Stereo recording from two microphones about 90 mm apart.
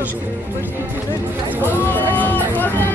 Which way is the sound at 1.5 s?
20° right (ahead or behind).